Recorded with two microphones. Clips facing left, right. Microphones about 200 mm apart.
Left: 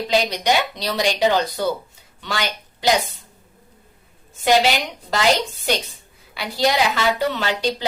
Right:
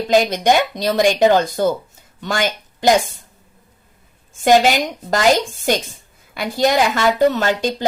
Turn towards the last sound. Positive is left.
turn(degrees=-45)  # may be behind; listen again after turning